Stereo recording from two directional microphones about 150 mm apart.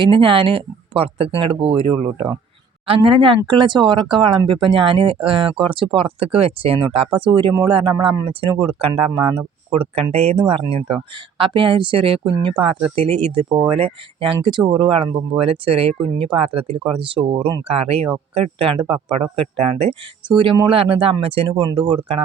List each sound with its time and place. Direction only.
0.0 s speech: 35° right (ahead or behind)